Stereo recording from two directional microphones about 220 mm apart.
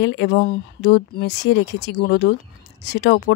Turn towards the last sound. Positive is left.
turn(degrees=45)  # may be behind; listen again after turning